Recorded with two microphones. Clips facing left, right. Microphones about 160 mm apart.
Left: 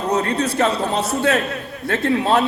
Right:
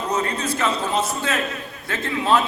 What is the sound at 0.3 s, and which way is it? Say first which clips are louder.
A man's voice: left 5 dB; 65° left (ahead or behind).